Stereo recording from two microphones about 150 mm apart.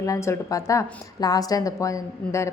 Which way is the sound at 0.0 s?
20° left (ahead or behind).